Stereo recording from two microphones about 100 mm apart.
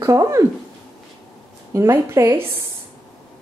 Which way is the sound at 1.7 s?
30° right (ahead or behind).